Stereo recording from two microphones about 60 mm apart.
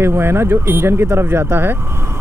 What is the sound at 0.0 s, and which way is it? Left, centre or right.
Speech, right.